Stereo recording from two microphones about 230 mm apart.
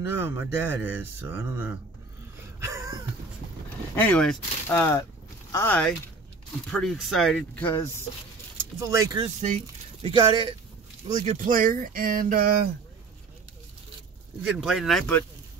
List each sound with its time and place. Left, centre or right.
0.0 s speech: centre
2.6 s a sound: centre
3.9 s speech: centre
8.7 s speech: centre
11.2 s speech: right
14.4 s speech: centre